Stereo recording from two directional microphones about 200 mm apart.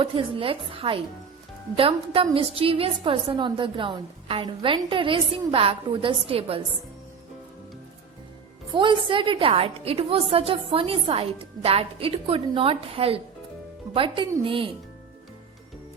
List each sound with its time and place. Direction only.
0.0 s a woman's voice: 25° right (ahead or behind)
8.7 s a woman's voice: 25° right (ahead or behind)